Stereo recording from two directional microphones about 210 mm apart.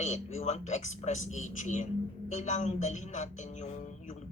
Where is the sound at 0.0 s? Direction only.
35° left (ahead or behind).